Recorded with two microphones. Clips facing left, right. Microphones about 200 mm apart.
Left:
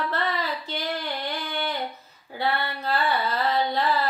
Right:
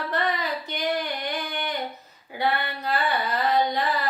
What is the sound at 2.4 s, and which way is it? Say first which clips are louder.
Mantra: right 1 dB; 15° right (ahead or behind).